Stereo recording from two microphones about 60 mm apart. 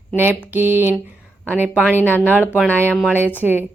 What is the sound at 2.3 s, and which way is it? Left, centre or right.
Speech, right.